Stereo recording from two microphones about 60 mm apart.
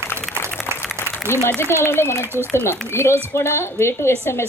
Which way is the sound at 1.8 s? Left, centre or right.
Left.